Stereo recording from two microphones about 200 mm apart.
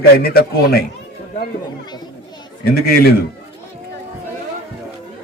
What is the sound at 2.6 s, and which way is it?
Speech, 50° left (ahead or behind).